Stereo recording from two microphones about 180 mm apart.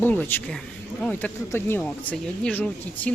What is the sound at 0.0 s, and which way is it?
Speech, 10° left (ahead or behind).